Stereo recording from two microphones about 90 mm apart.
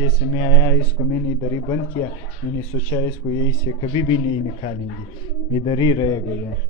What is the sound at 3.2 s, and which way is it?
Speech, 75° left (ahead or behind).